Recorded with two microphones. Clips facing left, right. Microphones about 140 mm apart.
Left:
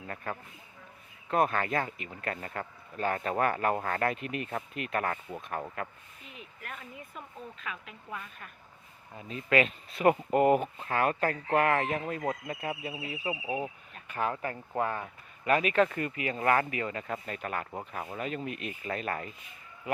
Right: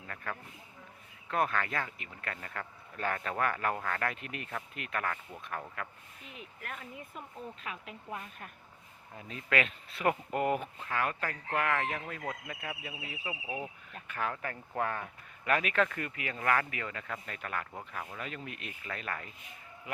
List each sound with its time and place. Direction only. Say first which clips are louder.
1.3 s speech: left 4 dB; 30° left (ahead or behind)
6.7 s speech: even; centre (ahead or behind)
9.3 s speech: left 5 dB; 30° left (ahead or behind)
15.4 s speech: left 4 dB; 30° left (ahead or behind)